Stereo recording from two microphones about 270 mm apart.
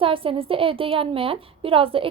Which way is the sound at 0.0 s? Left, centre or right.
Centre.